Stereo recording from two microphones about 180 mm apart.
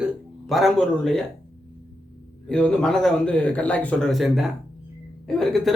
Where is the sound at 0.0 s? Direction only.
Centre (ahead or behind).